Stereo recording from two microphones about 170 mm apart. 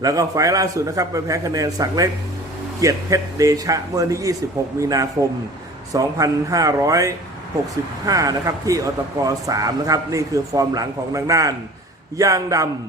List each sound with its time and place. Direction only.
0.0 s speech: 20° right (ahead or behind)